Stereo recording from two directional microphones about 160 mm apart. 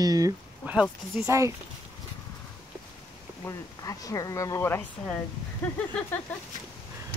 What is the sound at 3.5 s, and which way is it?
Speech, 20° left (ahead or behind).